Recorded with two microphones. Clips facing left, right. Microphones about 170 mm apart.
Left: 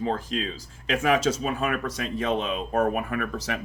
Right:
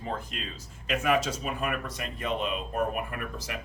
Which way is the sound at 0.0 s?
90° left.